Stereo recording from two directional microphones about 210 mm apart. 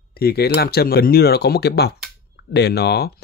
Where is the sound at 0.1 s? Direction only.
50° left (ahead or behind).